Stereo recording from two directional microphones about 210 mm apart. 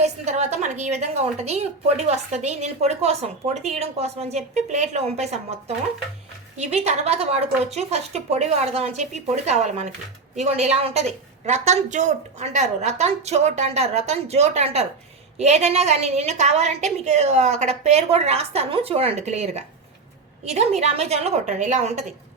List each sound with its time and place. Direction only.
0.0 s a woman's voice: 30° right (ahead or behind)